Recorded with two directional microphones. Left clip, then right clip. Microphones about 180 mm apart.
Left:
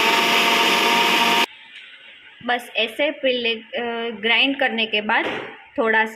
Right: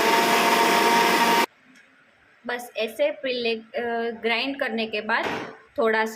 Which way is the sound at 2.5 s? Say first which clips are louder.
Left 7 dB; 25° left (ahead or behind).